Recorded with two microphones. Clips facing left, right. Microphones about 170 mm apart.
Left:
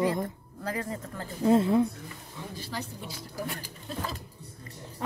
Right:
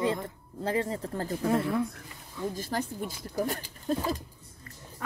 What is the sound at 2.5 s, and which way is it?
A woman's voice, 45° right (ahead or behind).